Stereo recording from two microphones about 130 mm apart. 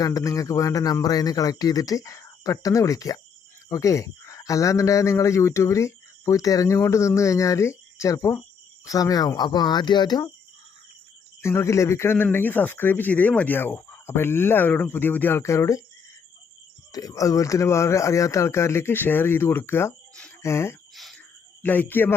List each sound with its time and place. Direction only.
0.0 s speech: 25° left (ahead or behind)
11.4 s speech: 20° left (ahead or behind)
16.9 s speech: 25° left (ahead or behind)
20.9 s cricket: centre (ahead or behind)
21.6 s speech: 15° left (ahead or behind)